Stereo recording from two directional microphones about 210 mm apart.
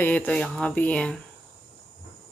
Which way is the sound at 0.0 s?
10° left (ahead or behind).